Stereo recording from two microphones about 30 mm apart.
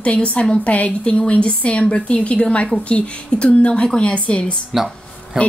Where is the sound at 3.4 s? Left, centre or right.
Left.